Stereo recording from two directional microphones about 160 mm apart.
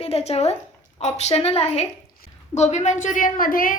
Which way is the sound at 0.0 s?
40° left (ahead or behind).